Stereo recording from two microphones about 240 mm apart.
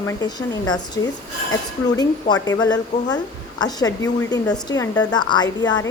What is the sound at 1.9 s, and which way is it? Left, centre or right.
Speech, centre.